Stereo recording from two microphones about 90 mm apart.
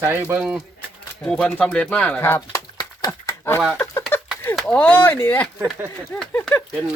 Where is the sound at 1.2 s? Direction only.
15° left (ahead or behind).